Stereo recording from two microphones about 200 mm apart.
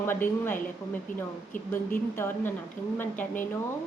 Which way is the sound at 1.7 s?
10° left (ahead or behind).